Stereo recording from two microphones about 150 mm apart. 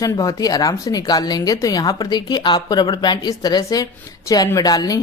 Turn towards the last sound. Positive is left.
turn(degrees=25)  # may be behind; listen again after turning